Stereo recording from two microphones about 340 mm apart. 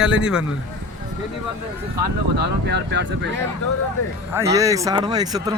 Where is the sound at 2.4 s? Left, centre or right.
Right.